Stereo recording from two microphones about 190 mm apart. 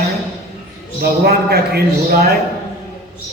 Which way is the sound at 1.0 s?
55° right (ahead or behind).